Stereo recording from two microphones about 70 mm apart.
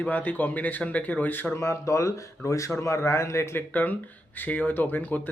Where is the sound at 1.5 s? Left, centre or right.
Left.